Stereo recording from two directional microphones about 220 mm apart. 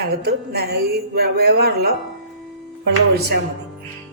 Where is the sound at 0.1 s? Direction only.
45° right (ahead or behind).